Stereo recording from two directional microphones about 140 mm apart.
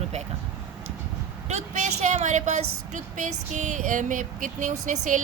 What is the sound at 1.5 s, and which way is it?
A woman's voice, 55° right (ahead or behind).